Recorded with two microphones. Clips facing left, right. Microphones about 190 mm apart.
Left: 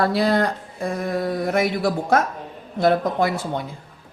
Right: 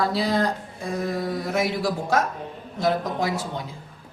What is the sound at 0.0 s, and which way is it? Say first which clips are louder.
Speech: left 4 dB; 60° left (ahead or behind).